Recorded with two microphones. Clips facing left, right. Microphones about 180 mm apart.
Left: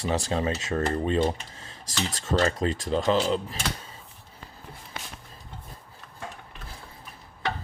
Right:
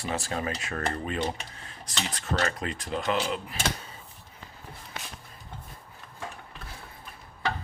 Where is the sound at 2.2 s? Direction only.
25° left (ahead or behind).